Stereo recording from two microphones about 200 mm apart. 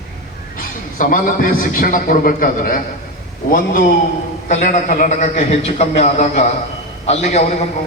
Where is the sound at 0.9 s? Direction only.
45° left (ahead or behind).